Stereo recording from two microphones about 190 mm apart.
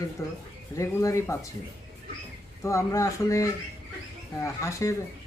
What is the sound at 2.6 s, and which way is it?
Speech, 15° left (ahead or behind).